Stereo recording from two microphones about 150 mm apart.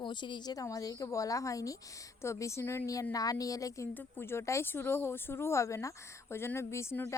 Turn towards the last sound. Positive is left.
turn(degrees=15)  # may be behind; listen again after turning